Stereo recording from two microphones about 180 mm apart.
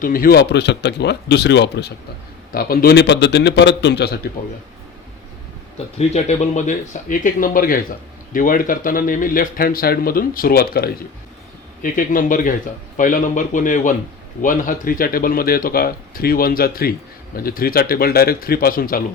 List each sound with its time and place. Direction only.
0.0 s speech: 50° left (ahead or behind); by 1.9 s 70° left (ahead or behind)
2.5 s speech: 55° left (ahead or behind)
6.0 s speech: 40° left (ahead or behind)